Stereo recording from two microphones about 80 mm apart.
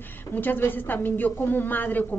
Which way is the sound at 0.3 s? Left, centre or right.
Left.